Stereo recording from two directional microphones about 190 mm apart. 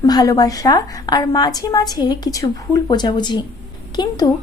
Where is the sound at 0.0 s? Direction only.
20° left (ahead or behind).